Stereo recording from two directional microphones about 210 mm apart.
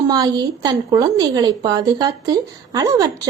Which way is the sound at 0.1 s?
20° right (ahead or behind).